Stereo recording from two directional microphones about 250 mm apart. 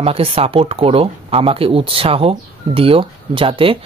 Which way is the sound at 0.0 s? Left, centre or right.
Right.